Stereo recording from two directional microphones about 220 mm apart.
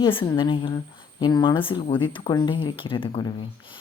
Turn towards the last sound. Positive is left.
turn(degrees=20)  # may be behind; listen again after turning